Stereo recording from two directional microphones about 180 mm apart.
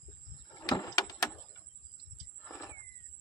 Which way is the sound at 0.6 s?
20° left (ahead or behind).